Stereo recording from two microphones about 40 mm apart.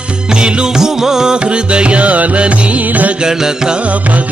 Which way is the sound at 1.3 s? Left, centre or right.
Right.